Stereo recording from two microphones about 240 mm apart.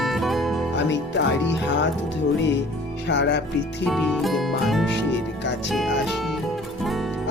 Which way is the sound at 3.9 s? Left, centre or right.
Centre.